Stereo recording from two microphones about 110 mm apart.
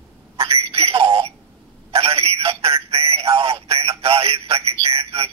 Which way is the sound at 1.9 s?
65° right (ahead or behind).